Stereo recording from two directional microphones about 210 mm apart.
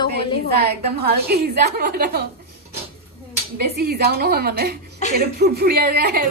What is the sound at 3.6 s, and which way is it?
A woman's voice, 50° right (ahead or behind).